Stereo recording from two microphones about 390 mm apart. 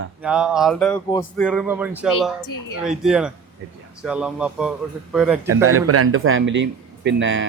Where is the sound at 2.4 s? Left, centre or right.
Left.